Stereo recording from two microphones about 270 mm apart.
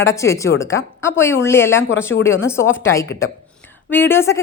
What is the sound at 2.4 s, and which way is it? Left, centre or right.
A woman's voice, centre.